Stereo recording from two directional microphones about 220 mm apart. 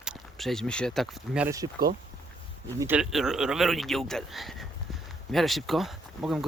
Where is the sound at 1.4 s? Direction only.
15° right (ahead or behind).